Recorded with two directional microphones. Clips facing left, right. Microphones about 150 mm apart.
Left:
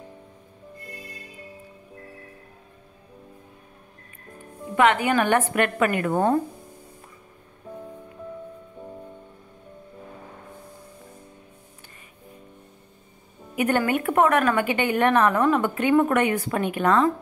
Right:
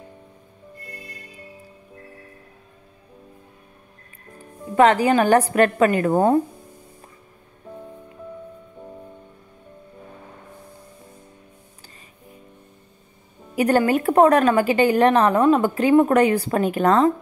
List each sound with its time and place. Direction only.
4.7 s a woman's voice: 35° right (ahead or behind)
13.6 s a woman's voice: 35° right (ahead or behind)